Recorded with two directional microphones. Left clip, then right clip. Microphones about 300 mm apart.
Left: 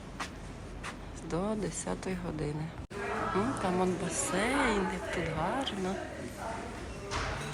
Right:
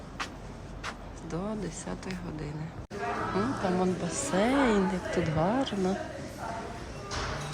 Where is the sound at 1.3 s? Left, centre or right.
Centre.